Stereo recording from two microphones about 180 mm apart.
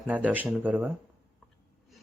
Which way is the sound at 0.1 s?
10° right (ahead or behind).